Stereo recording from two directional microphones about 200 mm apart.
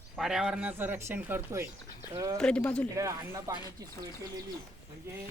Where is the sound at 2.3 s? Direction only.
5° left (ahead or behind).